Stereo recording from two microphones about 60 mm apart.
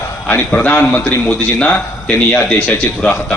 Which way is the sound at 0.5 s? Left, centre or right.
Left.